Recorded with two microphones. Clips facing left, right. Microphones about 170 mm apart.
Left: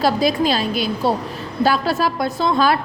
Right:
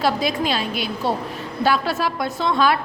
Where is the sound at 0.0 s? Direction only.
35° left (ahead or behind).